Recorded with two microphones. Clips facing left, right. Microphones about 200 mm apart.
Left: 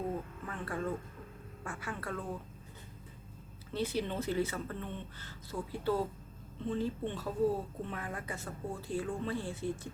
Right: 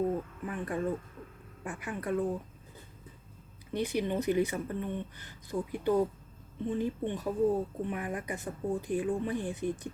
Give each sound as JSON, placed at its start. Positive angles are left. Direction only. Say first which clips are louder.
{"t": 0.4, "sound": "a woman's voice", "louder": "right 4 dB", "side_deg": -15}
{"t": 3.7, "sound": "a woman's voice", "louder": "right 4 dB", "side_deg": -15}